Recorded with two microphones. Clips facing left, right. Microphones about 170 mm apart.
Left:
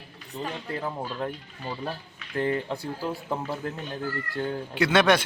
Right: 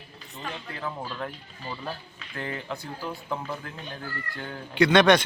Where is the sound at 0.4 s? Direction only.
30° left (ahead or behind).